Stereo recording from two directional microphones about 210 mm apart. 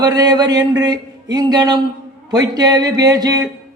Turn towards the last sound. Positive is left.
turn(degrees=-20)  # may be behind; listen again after turning